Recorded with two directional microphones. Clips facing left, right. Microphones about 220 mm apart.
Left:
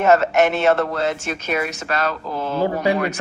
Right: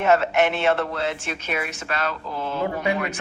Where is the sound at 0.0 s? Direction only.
40° left (ahead or behind).